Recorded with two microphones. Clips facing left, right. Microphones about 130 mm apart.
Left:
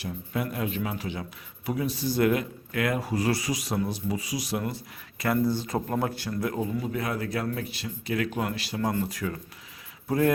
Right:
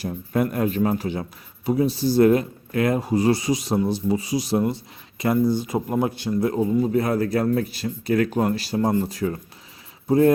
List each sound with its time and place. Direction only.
0.0 s speech: 45° right (ahead or behind)
1.6 s speech: 30° right (ahead or behind)
8.8 s speech: 25° right (ahead or behind)